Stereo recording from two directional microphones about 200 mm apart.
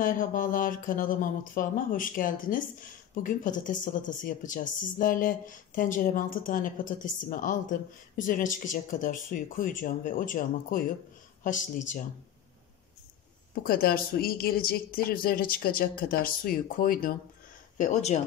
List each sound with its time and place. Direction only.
0.0 s speech: 45° left (ahead or behind)
13.7 s speech: 45° left (ahead or behind)